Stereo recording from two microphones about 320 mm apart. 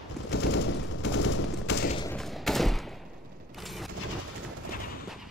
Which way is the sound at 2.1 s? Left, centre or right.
Centre.